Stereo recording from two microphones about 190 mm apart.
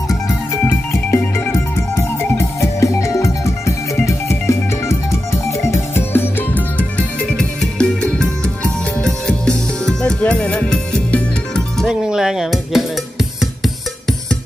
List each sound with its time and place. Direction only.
0.3 s music: 15° left (ahead or behind); by 12.8 s centre (ahead or behind)